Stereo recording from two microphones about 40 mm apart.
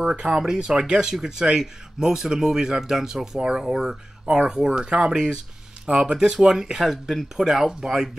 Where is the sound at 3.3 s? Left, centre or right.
Right.